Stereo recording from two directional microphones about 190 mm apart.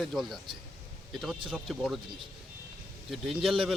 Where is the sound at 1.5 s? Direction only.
Centre (ahead or behind).